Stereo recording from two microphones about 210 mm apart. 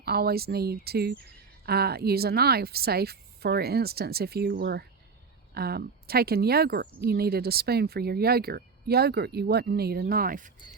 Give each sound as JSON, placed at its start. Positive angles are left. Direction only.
{"t": 0.0, "sound": "speech", "side_deg": -50}